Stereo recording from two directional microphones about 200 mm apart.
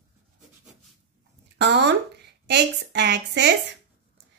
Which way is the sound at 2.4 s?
60° right (ahead or behind).